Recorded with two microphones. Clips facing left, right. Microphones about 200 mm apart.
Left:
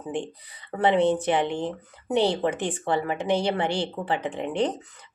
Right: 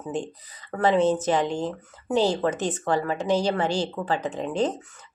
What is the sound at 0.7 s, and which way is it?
Speech, 25° left (ahead or behind).